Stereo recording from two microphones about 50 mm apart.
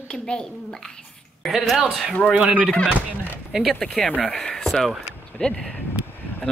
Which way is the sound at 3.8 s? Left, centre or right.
Centre.